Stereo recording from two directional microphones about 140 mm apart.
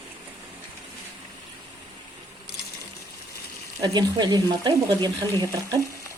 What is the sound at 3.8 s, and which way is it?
Speech, 30° right (ahead or behind).